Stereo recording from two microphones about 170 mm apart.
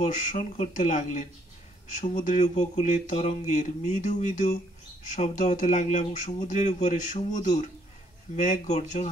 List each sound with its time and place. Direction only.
0.0 s speech: 45° left (ahead or behind)